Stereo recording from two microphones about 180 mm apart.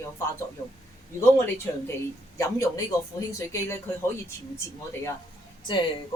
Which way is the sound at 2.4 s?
20° left (ahead or behind).